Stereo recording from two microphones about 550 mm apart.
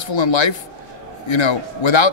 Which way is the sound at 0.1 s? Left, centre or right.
Left.